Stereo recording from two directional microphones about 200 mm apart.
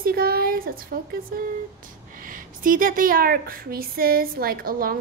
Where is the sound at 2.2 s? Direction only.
45° right (ahead or behind).